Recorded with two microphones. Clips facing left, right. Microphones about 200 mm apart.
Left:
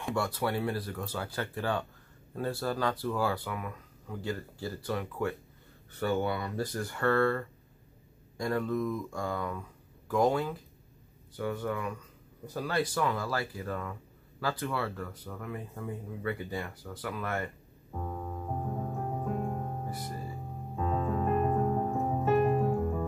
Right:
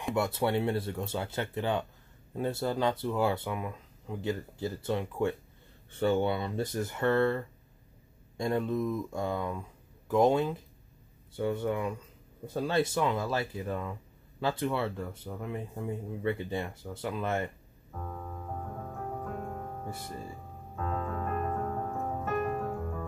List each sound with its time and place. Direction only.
0.1 s speech: 20° right (ahead or behind)
17.9 s music: 20° left (ahead or behind)
20.7 s music: 15° left (ahead or behind)
22.6 s keyboard: 15° left (ahead or behind)